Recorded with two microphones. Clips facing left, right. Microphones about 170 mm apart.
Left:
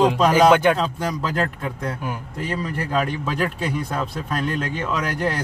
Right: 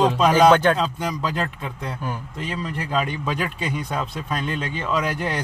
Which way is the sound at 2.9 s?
5° left (ahead or behind).